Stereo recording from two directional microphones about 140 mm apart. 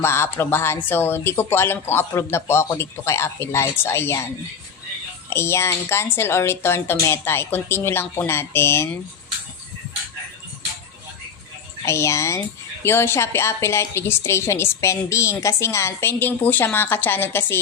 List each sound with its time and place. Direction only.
0.0 s a woman's voice: 20° left (ahead or behind)
5.3 s a woman's voice: 20° left (ahead or behind)
11.9 s a child's voice: 20° left (ahead or behind)